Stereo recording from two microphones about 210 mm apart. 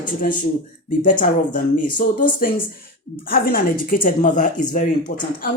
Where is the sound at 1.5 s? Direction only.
40° left (ahead or behind).